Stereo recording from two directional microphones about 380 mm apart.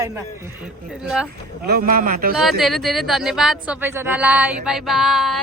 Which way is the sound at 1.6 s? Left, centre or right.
Right.